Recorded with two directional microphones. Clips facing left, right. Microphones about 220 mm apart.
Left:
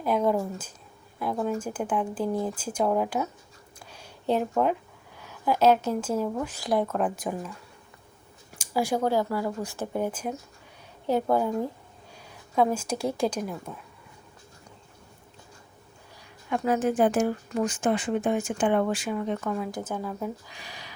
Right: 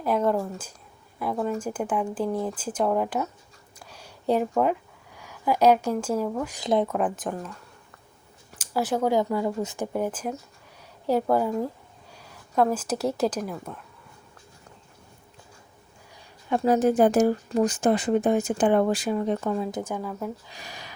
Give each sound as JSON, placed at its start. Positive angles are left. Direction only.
{"t": 0.2, "sound": "a sound", "side_deg": 0}
{"t": 1.2, "sound": "speech", "side_deg": 0}
{"t": 1.8, "sound": "speech", "side_deg": -5}
{"t": 2.4, "sound": "speech", "side_deg": 10}
{"t": 3.9, "sound": "a sound", "side_deg": -5}
{"t": 6.4, "sound": "speech", "side_deg": -15}
{"t": 7.2, "sound": "speech", "side_deg": 10}
{"t": 8.6, "sound": "speech", "side_deg": 10}
{"t": 9.0, "sound": "speech", "side_deg": -20}
{"t": 16.5, "sound": "speech", "side_deg": -40}
{"t": 19.8, "sound": "speech", "side_deg": -10}
{"t": 20.1, "sound": "speech", "side_deg": 0}
{"t": 20.6, "sound": "a sound", "side_deg": -45}